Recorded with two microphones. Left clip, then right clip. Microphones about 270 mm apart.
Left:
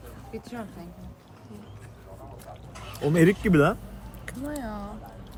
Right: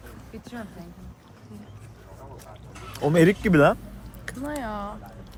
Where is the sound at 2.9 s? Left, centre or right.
Centre.